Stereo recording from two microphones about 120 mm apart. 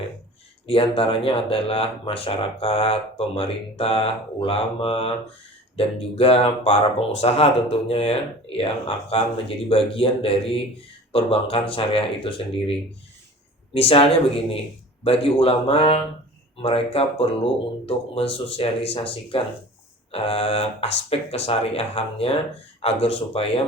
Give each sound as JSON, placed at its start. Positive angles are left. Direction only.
{"t": 0.7, "sound": "speech", "side_deg": 50}
{"t": 13.7, "sound": "speech", "side_deg": 55}